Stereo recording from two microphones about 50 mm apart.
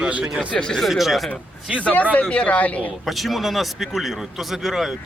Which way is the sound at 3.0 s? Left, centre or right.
Centre.